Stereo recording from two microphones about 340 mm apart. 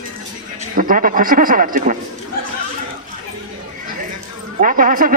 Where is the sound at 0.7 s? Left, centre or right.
Right.